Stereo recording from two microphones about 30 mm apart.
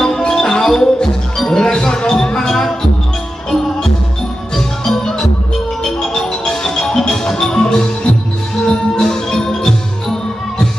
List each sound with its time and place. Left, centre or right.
0.2 s music: centre
2.5 s music: centre
4.5 s music: centre
6.4 s music: centre